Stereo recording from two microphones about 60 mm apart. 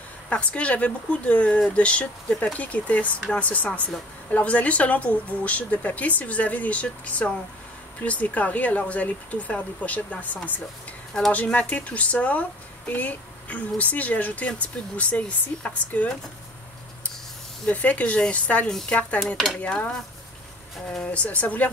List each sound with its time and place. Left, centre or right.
0.3 s speech: left
17.6 s speech: left
19.2 s stir: centre
19.6 s speech: left
21.0 s speech: left